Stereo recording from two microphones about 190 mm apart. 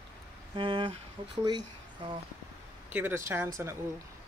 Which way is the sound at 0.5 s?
25° right (ahead or behind).